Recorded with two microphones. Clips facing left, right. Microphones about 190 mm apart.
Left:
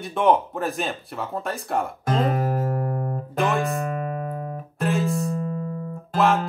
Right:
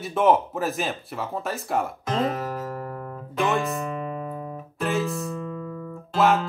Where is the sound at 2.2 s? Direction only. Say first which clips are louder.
Left 4 dB; 50° left (ahead or behind).